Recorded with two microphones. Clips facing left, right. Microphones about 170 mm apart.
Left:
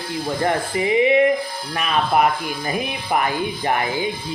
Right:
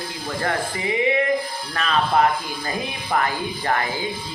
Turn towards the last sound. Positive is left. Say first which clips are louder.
# left 2 dB
turn(degrees=20)  # may be behind; listen again after turning